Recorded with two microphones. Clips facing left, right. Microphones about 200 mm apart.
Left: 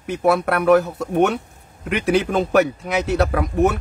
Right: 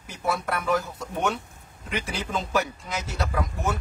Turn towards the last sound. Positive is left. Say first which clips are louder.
# left 10 dB
turn(degrees=65)  # may be behind; listen again after turning